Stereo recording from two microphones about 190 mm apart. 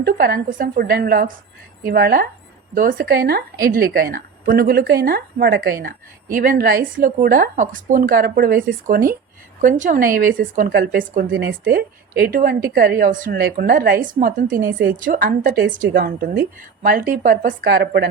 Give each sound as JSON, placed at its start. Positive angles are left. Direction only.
{"t": 0.0, "sound": "a woman's voice", "side_deg": -55}